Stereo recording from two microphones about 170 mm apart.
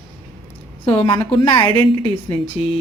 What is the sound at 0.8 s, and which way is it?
Speech, 30° left (ahead or behind).